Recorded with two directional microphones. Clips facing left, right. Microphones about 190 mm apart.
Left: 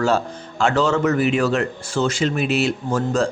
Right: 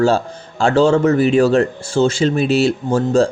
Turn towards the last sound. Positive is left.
turn(degrees=-30)  # may be behind; listen again after turning